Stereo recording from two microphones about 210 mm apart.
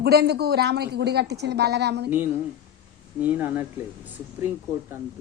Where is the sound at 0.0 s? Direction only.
50° right (ahead or behind).